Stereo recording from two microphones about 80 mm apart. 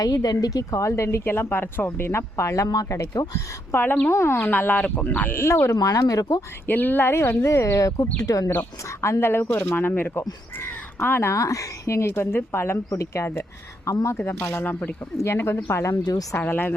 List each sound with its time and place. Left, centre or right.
0.0 s a woman's voice: left
3.7 s a woman's voice: left
5.4 s a woman's voice: left
5.7 s speech: left
6.7 s a woman's voice: left
14.2 s a woman's voice: left
16.4 s speech: left